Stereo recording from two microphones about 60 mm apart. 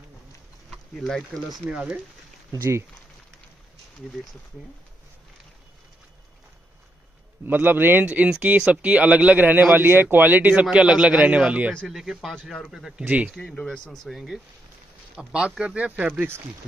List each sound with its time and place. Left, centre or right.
0.7 s speech: centre
1.7 s speech: centre
7.4 s speech: right
8.1 s speech: right
11.9 s speech: centre
12.4 s speech: centre
13.0 s speech: right
13.6 s speech: centre
15.1 s speech: centre